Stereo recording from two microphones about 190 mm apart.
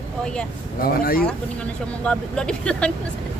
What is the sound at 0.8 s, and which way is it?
Speech, 50° left (ahead or behind).